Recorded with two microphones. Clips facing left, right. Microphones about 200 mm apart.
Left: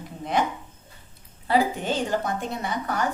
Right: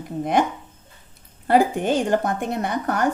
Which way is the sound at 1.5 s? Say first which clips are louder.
Right 5 dB; 50° right (ahead or behind).